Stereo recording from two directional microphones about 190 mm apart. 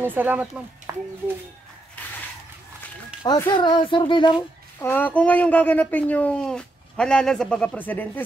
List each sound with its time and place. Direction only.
0.0 s speech: 10° right (ahead or behind)
3.3 s speech: 20° left (ahead or behind)
4.7 s speech: 10° left (ahead or behind)